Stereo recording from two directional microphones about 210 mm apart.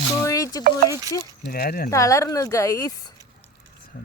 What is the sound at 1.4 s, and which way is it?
Speech, 45° left (ahead or behind).